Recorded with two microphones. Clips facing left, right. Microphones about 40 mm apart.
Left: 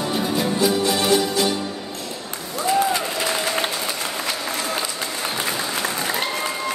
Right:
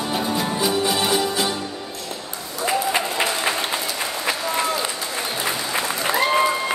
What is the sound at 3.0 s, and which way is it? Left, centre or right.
Applause, right.